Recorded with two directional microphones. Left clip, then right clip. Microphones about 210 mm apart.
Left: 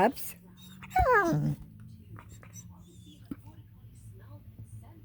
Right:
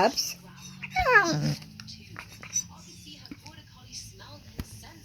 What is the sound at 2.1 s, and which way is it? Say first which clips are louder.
Whispering: right 7 dB; 5° left (ahead or behind).